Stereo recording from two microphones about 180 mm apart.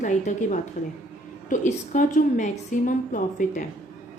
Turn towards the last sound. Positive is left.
turn(degrees=45)  # may be behind; listen again after turning